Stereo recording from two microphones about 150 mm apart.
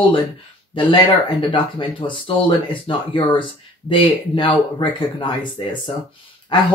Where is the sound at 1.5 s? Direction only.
35° left (ahead or behind).